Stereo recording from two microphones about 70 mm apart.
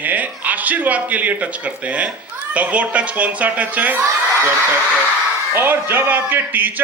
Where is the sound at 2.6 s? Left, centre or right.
Right.